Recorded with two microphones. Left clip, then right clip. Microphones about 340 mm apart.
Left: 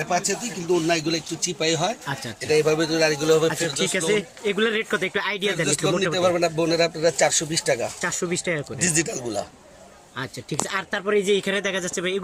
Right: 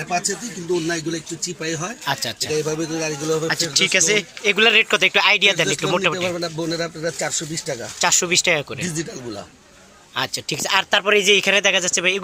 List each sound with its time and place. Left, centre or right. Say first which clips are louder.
0.1 s speech: right 3 dB; centre
2.6 s speech: left 4 dB; left
3.8 s speech: right 10 dB; centre
6.1 s speech: left 4 dB; left
8.0 s speech: right 8 dB; centre
8.8 s speech: left 3 dB; left
10.7 s speech: right 8 dB; centre